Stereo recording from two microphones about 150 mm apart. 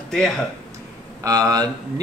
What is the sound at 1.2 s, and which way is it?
Speech, 25° right (ahead or behind).